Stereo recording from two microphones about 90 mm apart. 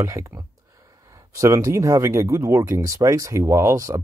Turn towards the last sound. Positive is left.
turn(degrees=-35)  # may be behind; listen again after turning